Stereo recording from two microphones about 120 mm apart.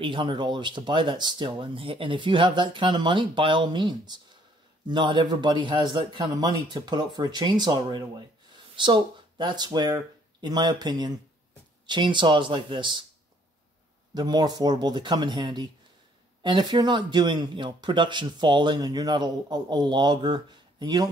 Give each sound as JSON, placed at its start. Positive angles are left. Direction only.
{"t": 0.0, "sound": "speech", "side_deg": -45}
{"t": 14.1, "sound": "speech", "side_deg": -35}